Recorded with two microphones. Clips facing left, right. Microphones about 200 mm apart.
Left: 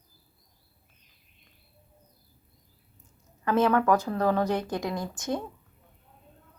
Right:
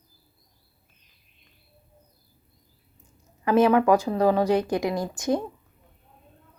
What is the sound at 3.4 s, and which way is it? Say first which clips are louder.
A woman's voice: right 4 dB; 15° right (ahead or behind).